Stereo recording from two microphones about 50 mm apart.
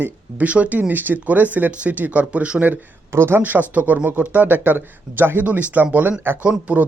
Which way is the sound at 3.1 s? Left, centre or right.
Right.